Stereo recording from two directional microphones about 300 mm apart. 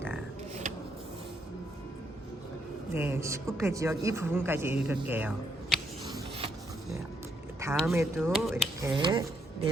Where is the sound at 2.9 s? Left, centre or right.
Centre.